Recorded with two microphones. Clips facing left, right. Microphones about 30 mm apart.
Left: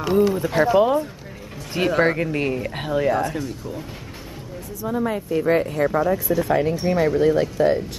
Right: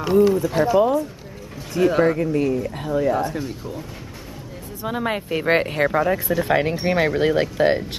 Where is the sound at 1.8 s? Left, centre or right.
Left.